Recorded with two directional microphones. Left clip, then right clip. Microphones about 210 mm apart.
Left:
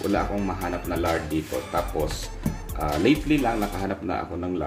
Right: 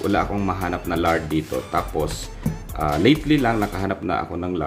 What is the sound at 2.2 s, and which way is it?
Music, centre (ahead or behind).